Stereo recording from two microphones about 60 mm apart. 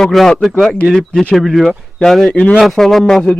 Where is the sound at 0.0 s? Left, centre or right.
Centre.